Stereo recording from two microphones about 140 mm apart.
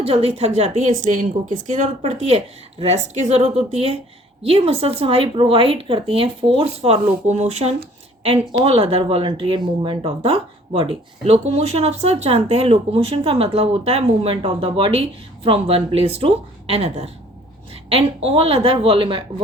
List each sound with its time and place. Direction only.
0.0 s speech: 45° right (ahead or behind)